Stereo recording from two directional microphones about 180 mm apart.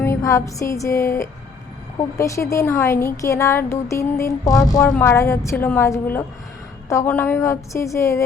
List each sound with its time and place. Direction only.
0.0 s a woman's voice: 15° left (ahead or behind)